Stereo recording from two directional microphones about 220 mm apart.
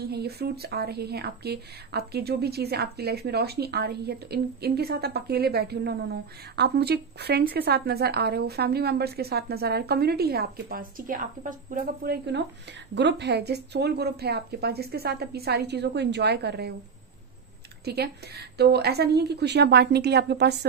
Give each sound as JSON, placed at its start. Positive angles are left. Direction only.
{"t": 0.0, "sound": "speech", "side_deg": -45}
{"t": 17.8, "sound": "speech", "side_deg": -45}